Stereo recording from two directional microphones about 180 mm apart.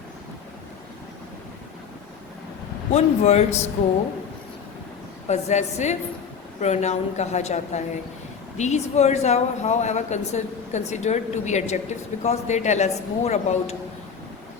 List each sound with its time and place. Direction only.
2.9 s speech: 35° left (ahead or behind)
5.3 s speech: 40° left (ahead or behind)